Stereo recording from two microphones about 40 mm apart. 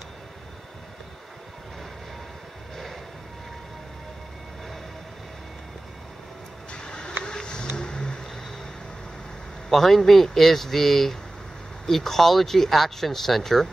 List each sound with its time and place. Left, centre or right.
6.7 s a sound: left
7.7 s vehicle: centre
9.7 s speech: centre